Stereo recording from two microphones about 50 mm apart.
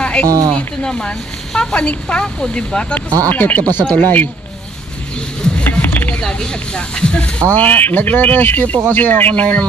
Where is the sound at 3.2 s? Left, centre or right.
Left.